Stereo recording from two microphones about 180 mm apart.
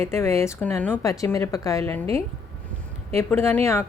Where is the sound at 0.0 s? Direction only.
15° left (ahead or behind).